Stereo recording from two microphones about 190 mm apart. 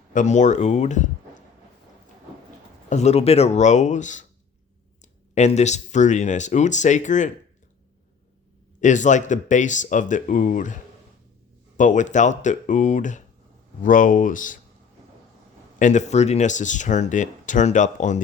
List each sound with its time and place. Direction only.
0.1 s speech: 40° left (ahead or behind)
2.9 s speech: 35° left (ahead or behind)
5.3 s speech: 35° left (ahead or behind)
8.8 s speech: 40° left (ahead or behind)
11.8 s speech: 40° left (ahead or behind)
15.8 s speech: 40° left (ahead or behind)